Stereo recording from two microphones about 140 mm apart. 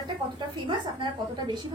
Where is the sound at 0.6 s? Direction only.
35° right (ahead or behind).